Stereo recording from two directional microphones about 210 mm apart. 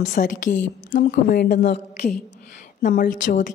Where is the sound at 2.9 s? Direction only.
45° left (ahead or behind).